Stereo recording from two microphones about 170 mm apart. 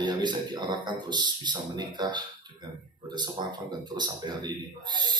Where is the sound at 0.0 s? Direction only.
25° right (ahead or behind).